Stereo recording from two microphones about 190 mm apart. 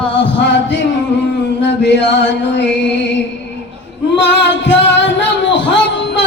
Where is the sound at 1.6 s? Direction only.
65° left (ahead or behind).